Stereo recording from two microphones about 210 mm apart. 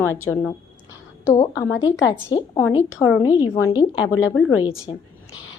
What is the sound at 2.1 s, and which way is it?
Speech, 20° left (ahead or behind).